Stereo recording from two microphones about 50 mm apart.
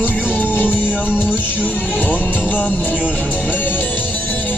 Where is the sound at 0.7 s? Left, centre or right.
Right.